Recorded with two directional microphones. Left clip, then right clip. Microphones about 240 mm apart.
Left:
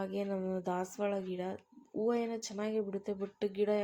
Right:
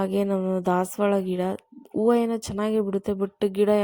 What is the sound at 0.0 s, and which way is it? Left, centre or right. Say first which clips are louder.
Speech: right 12 dB; right.